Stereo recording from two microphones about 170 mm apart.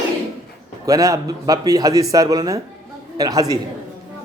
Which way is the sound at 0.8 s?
20° right (ahead or behind).